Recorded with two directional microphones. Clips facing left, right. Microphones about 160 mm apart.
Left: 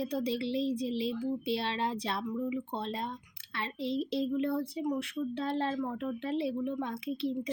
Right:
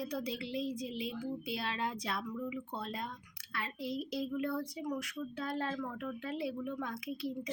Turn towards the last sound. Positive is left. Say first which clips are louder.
# left 6 dB
turn(degrees=25)  # may be behind; listen again after turning